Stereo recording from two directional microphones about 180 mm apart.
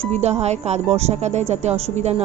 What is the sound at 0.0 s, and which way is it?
Speech, 40° right (ahead or behind).